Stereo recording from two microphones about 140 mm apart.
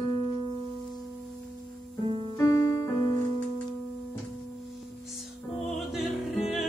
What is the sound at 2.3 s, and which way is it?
Music, 20° left (ahead or behind).